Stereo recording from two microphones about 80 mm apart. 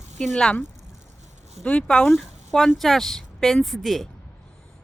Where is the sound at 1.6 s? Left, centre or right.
Centre.